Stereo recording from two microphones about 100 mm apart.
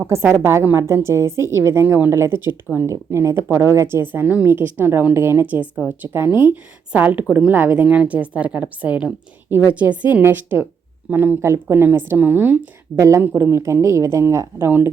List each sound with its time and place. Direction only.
0.0 s a woman's voice: 25° right (ahead or behind)